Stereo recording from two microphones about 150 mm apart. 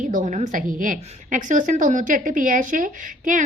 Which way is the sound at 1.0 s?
45° right (ahead or behind).